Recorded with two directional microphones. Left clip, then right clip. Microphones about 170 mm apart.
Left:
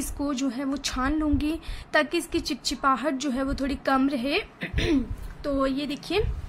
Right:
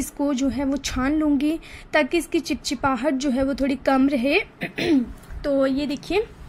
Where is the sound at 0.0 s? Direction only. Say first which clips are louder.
Right 5 dB; 10° right (ahead or behind).